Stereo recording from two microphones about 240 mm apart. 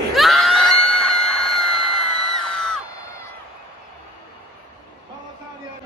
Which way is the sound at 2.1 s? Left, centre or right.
Right.